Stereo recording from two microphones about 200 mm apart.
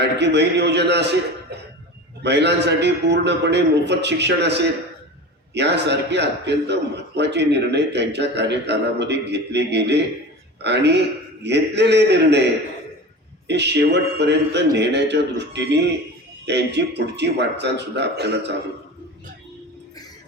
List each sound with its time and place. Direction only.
0.0 s a man's voice: 60° right (ahead or behind)
13.5 s a man's voice: 60° right (ahead or behind)